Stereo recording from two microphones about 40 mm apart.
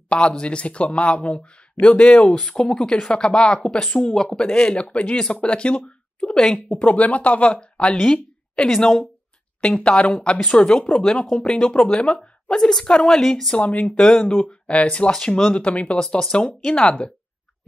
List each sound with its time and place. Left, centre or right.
0.1 s speech: left
5.9 s a sound: left
6.4 s speech: centre
6.8 s a woman's voice: left; by 11.7 s centre
12.0 s speech: left
12.5 s speech: centre
13.1 s speech: centre
13.6 s speech: left
13.9 s speech: centre
15.0 s speech: centre
15.6 s speech: left
15.9 s speech: centre